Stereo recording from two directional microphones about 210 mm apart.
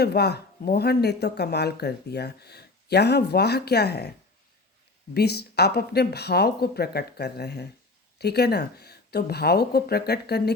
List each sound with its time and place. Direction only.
0.0 s speech: 50° left (ahead or behind)
5.1 s speech: 50° left (ahead or behind)